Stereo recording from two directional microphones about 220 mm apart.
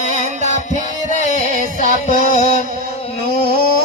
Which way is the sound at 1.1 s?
35° left (ahead or behind).